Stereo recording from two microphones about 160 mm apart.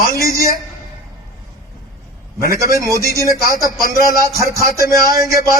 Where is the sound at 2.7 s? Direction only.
20° right (ahead or behind).